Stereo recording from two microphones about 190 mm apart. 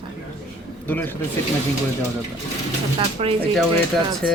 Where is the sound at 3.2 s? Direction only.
30° right (ahead or behind).